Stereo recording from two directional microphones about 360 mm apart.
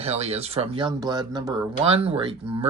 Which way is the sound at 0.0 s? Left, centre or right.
Centre.